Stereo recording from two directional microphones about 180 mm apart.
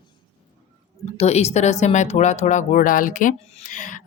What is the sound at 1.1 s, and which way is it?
A woman's voice, 35° left (ahead or behind).